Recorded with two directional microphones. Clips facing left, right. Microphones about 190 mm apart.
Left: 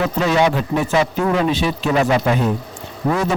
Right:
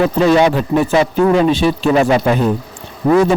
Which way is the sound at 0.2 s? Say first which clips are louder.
Right 4 dB; 35° right (ahead or behind).